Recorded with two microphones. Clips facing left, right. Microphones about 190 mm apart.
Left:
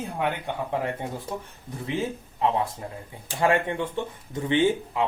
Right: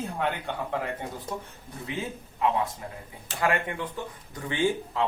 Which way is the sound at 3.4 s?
25° left (ahead or behind).